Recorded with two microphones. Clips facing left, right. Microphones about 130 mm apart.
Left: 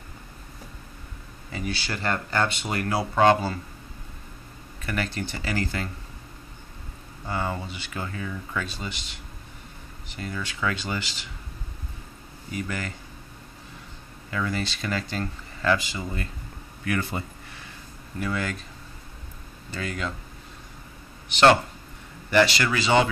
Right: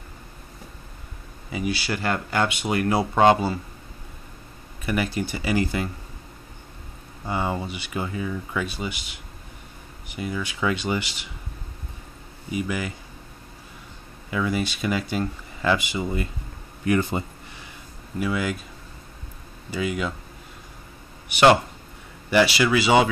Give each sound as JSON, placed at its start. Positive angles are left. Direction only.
{"t": 1.5, "sound": "speech", "side_deg": -10}
{"t": 4.8, "sound": "speech", "side_deg": -10}
{"t": 7.2, "sound": "speech", "side_deg": -20}
{"t": 12.4, "sound": "speech", "side_deg": -10}
{"t": 14.3, "sound": "speech", "side_deg": -10}
{"t": 18.2, "sound": "speech", "side_deg": -10}
{"t": 19.7, "sound": "speech", "side_deg": -10}
{"t": 21.3, "sound": "speech", "side_deg": -10}